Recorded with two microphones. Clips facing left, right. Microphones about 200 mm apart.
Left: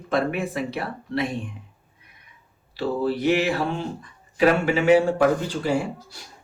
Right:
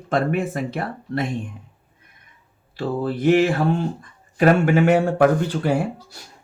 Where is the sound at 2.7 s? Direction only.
50° right (ahead or behind).